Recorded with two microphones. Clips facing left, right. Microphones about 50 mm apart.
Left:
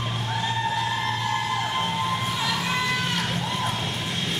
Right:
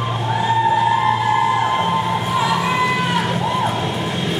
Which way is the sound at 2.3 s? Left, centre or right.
Centre.